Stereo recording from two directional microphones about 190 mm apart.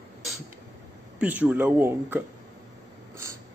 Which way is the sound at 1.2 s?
10° right (ahead or behind).